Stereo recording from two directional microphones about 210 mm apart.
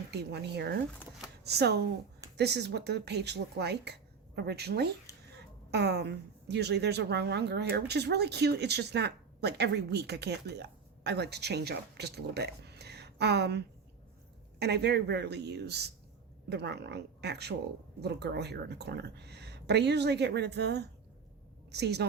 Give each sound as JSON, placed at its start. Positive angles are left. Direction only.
{"t": 0.1, "sound": "a woman's voice", "side_deg": -50}